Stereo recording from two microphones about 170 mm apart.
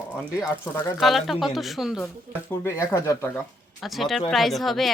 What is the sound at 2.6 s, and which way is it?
Speech, 20° left (ahead or behind).